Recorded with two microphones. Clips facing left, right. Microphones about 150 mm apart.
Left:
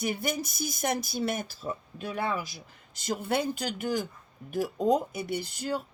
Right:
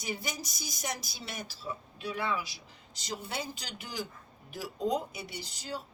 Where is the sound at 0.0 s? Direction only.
55° left (ahead or behind).